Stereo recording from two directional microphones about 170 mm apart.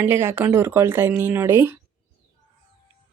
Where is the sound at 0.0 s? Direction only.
15° right (ahead or behind).